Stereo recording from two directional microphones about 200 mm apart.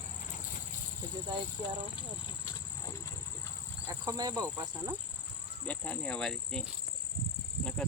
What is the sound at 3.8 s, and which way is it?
Insect, 15° right (ahead or behind).